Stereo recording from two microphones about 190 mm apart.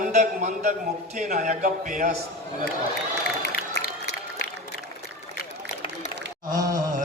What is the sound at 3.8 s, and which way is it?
Run, 60° left (ahead or behind).